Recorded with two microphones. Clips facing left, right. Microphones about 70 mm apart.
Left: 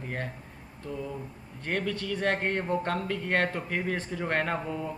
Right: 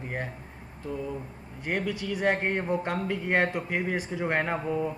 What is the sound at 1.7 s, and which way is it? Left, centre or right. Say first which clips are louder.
A man's voice: right 1 dB; centre.